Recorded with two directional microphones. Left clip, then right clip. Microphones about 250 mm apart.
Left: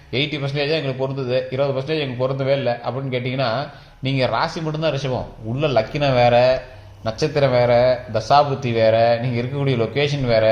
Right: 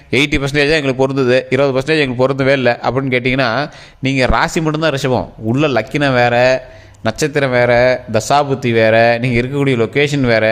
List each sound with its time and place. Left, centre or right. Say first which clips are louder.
0.1 s a man's voice: right 9 dB; right